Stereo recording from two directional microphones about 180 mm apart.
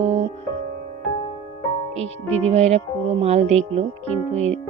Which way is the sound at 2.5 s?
40° right (ahead or behind).